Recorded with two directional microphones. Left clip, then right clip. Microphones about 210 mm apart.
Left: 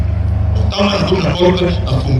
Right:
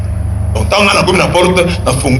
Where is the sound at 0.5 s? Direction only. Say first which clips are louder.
Right 7 dB; 55° right (ahead or behind).